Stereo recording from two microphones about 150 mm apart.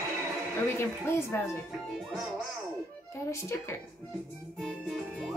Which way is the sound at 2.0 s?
Centre (ahead or behind).